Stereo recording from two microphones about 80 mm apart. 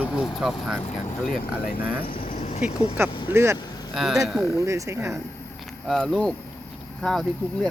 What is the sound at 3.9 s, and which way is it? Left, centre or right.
Speech, centre.